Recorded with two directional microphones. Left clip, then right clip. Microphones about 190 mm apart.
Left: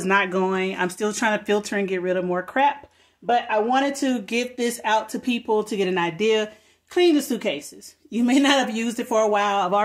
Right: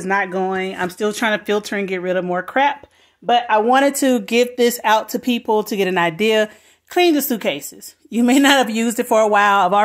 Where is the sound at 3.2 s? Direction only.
40° right (ahead or behind).